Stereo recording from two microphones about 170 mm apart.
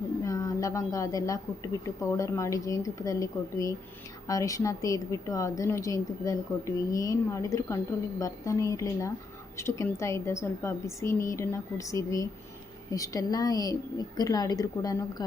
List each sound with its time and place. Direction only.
0.3 s a woman's voice: 20° left (ahead or behind)